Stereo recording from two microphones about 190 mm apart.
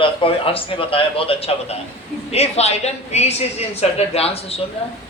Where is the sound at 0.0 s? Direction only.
30° left (ahead or behind).